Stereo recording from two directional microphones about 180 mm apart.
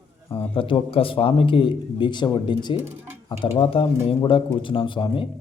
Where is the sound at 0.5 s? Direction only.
30° left (ahead or behind).